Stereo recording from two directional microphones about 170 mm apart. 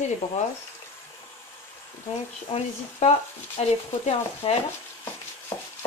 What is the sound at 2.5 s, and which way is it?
Speech, 35° left (ahead or behind).